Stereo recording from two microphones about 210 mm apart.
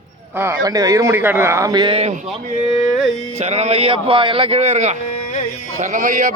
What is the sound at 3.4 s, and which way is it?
Speech, 30° right (ahead or behind).